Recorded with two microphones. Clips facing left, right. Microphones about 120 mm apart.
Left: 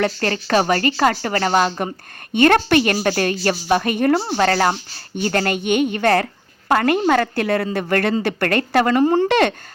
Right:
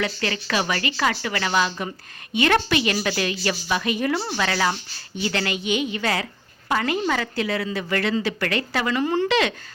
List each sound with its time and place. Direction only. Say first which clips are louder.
0.0 s a woman's voice: left 6 dB; 45° left (ahead or behind)